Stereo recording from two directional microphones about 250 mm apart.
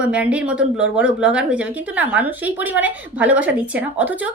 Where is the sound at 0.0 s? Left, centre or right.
Centre.